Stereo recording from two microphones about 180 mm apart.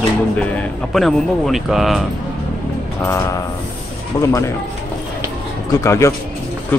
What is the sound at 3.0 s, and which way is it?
Speech, 15° left (ahead or behind).